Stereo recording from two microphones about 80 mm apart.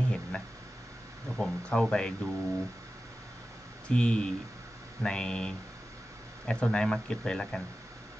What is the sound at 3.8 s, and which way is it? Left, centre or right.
A man's voice, centre.